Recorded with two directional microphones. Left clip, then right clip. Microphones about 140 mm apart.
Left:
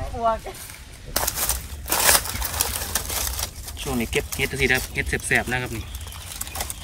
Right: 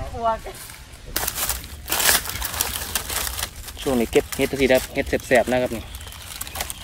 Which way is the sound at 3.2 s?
10° right (ahead or behind).